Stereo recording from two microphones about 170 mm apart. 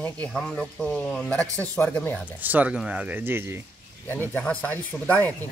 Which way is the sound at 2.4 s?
10° right (ahead or behind).